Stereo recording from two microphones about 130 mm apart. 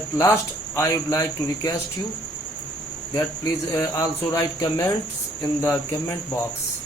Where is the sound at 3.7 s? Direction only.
25° left (ahead or behind).